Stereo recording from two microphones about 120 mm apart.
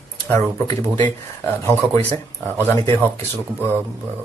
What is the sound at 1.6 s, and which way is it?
Speech, 20° left (ahead or behind).